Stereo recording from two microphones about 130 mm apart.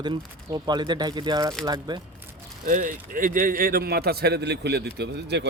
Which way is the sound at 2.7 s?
90° right.